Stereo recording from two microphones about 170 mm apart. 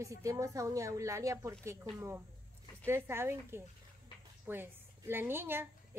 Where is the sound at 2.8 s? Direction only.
15° right (ahead or behind).